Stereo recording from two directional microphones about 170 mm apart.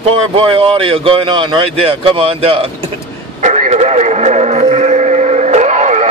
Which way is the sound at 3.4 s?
45° right (ahead or behind).